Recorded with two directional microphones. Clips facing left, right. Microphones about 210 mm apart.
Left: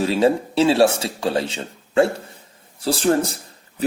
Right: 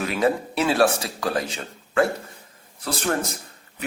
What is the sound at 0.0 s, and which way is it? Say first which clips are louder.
A man's voice: left 5 dB; 30° left (ahead or behind).